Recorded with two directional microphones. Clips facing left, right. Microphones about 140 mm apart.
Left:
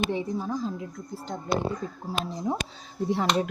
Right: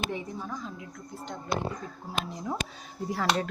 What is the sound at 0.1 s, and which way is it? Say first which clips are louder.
Speech: left 7 dB; 30° left (ahead or behind).